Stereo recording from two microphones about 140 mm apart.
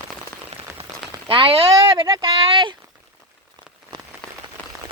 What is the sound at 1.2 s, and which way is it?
Speech, 40° right (ahead or behind).